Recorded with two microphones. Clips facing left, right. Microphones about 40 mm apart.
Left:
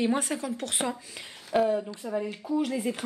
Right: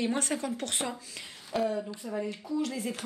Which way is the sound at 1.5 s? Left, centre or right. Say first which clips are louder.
Left 5 dB; left.